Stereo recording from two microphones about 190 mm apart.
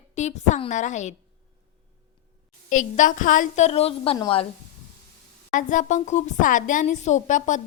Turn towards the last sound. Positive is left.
turn(degrees=40)  # may be behind; listen again after turning